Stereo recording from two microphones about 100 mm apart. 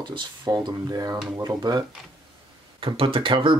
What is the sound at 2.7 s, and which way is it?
Speech, 60° right (ahead or behind).